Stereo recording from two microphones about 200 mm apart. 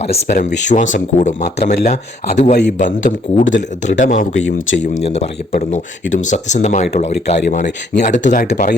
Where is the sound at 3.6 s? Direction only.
40° left (ahead or behind).